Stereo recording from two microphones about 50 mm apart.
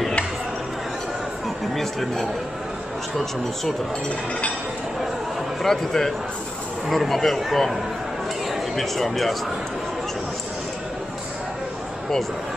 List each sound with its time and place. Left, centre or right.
1.8 s speech: centre
5.6 s a man's voice: centre